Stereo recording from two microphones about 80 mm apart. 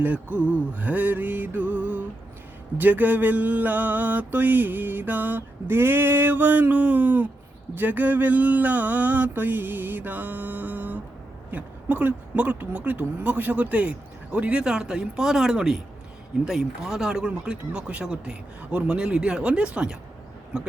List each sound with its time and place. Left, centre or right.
0.0 s mantra: right
11.5 s speech: right